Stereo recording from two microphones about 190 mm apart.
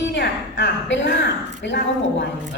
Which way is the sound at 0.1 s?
65° left (ahead or behind).